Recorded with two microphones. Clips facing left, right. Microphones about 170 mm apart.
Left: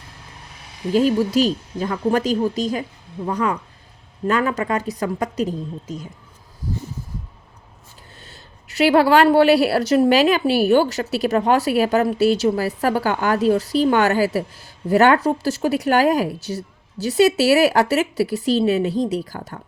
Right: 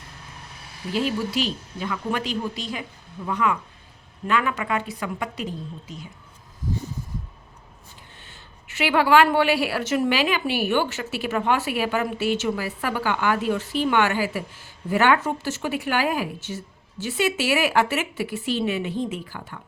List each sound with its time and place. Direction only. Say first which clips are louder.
0.9 s a woman's voice: left 8 dB; 40° left (ahead or behind)
6.6 s a sound: left 1 dB; 35° left (ahead or behind)
8.2 s a woman's voice: left 3 dB; 40° left (ahead or behind)